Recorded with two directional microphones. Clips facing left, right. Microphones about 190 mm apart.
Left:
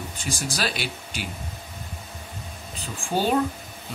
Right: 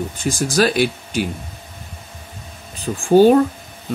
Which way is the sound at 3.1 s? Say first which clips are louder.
Right 13 dB; 50° right (ahead or behind).